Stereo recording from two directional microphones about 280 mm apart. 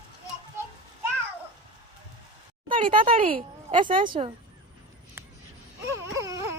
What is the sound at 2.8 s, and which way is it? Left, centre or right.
Speech, centre.